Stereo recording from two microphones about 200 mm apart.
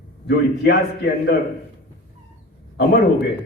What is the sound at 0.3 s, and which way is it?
A man's voice, 55° left (ahead or behind).